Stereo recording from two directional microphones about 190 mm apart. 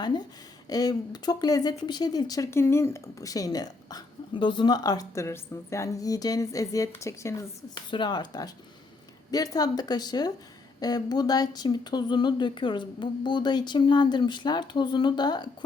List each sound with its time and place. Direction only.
0.7 s speech: 20° left (ahead or behind)